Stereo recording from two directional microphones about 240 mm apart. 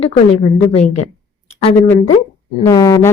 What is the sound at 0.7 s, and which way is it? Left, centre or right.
Speech, left.